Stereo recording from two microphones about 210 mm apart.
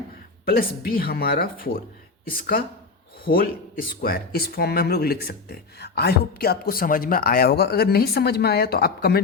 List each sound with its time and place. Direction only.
0.4 s speech: 45° left (ahead or behind)